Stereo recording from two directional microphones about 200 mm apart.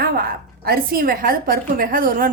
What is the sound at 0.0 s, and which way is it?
A woman's voice, 50° right (ahead or behind).